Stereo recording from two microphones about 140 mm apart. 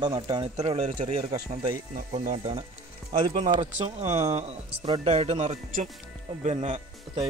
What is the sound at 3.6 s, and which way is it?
Speech, 55° right (ahead or behind).